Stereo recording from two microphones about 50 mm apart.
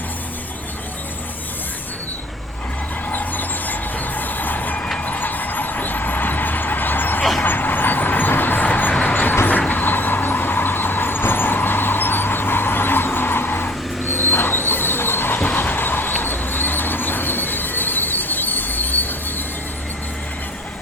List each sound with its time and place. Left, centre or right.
3.1 s vehicle: left
9.0 s vehicle: left
15.4 s a sound: left